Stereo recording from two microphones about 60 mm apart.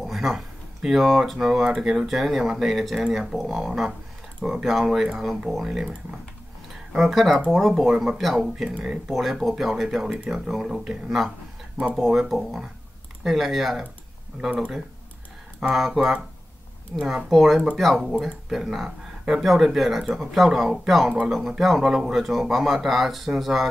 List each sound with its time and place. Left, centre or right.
0.0 s a sound: centre
0.8 s speech: centre
7.0 s speech: centre
9.0 s speech: centre
14.5 s speech: centre
15.7 s speech: centre